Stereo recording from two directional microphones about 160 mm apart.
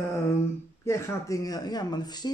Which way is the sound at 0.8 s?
15° left (ahead or behind).